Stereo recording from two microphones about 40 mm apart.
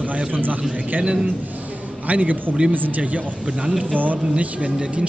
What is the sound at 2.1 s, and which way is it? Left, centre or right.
A man's voice, right.